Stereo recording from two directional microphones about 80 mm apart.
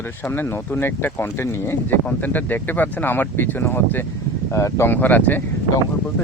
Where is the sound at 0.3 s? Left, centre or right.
Left.